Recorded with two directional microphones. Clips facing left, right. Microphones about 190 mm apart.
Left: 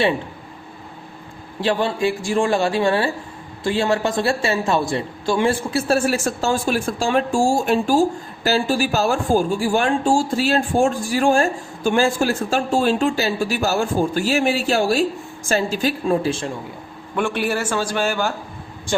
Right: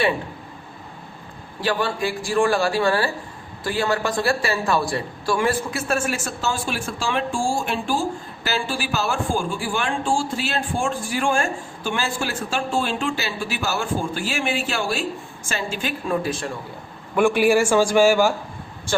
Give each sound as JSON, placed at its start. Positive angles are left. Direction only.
{"t": 1.6, "sound": "a man's voice", "side_deg": 25}
{"t": 17.2, "sound": "speech", "side_deg": -10}